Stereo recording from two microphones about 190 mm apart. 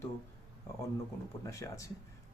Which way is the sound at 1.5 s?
15° left (ahead or behind).